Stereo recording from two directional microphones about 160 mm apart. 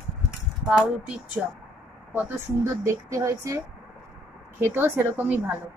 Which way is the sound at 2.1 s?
15° right (ahead or behind).